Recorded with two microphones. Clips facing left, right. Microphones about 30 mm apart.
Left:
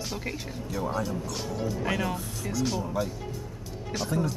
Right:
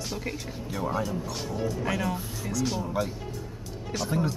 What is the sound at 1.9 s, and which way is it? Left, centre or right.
Speech, centre.